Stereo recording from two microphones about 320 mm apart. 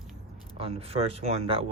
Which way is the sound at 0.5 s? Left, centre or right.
Centre.